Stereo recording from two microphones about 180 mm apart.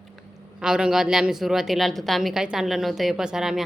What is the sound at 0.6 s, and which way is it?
A woman's voice, 5° right (ahead or behind).